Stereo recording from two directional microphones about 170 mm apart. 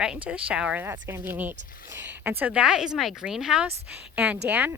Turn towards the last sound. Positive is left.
turn(degrees=-10)  # may be behind; listen again after turning